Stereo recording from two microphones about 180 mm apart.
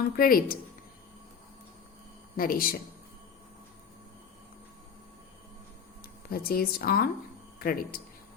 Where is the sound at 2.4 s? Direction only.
55° left (ahead or behind).